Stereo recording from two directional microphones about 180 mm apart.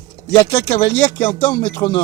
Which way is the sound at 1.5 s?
25° left (ahead or behind).